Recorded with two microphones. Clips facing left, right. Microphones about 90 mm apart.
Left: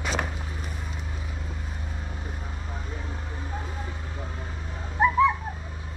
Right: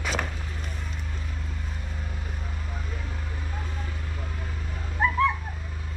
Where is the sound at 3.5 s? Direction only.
15° left (ahead or behind).